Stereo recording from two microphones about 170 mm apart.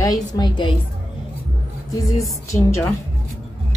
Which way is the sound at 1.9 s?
20° left (ahead or behind).